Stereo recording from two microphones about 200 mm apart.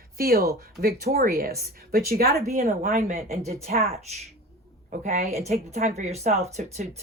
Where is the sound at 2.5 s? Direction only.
40° right (ahead or behind).